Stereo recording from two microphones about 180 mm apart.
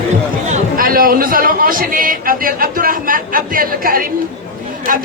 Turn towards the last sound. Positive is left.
turn(degrees=-50)  # may be behind; listen again after turning